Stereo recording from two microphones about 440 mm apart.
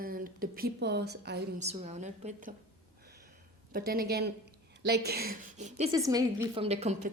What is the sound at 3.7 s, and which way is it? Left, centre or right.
A woman's voice, centre.